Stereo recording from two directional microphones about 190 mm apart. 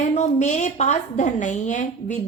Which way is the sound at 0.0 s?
35° left (ahead or behind).